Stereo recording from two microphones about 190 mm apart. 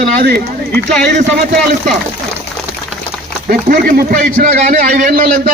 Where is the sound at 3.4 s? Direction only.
50° right (ahead or behind).